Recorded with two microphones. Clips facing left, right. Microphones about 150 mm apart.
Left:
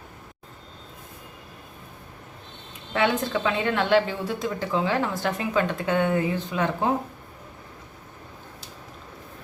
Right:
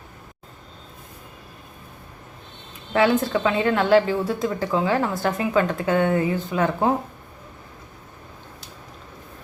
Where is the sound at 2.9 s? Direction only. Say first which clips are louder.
Right 5 dB; 40° right (ahead or behind).